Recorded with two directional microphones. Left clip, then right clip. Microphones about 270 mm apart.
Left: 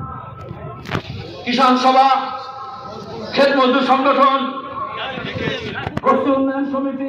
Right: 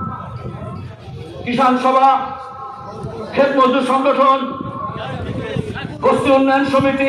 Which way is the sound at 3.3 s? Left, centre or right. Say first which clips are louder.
Right 1 dB; right.